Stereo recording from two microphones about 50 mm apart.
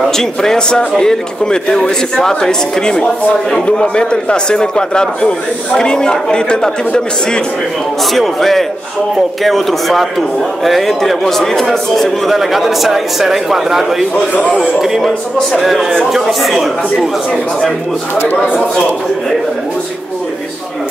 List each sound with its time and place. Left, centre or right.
0.1 s speech: centre
8.0 s a man's voice: centre